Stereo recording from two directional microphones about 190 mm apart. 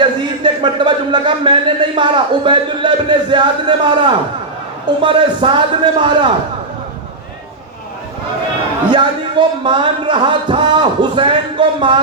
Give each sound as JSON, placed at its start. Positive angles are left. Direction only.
{"t": 0.0, "sound": "a man's voice", "side_deg": -25}
{"t": 8.9, "sound": "a man's voice", "side_deg": -25}